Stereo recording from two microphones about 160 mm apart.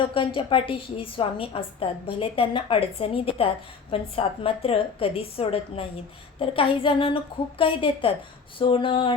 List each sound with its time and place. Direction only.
0.1 s a woman's voice: 35° left (ahead or behind)